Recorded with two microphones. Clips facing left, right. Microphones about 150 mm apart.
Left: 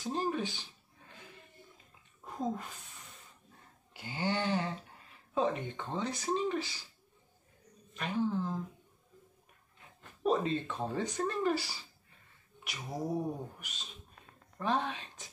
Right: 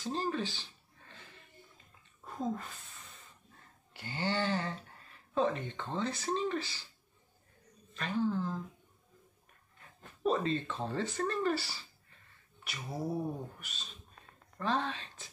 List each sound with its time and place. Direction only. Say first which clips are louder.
0.0 s a sound: left 1 dB; 15° left (ahead or behind)
3.9 s speech: left 1 dB; 10° left (ahead or behind)
7.9 s speech: even; 15° left (ahead or behind)
10.2 s speech: left 1 dB; 10° left (ahead or behind)